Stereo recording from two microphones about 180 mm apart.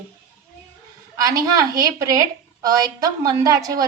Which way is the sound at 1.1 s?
20° right (ahead or behind).